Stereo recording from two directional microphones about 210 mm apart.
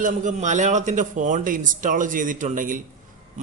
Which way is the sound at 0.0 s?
40° right (ahead or behind).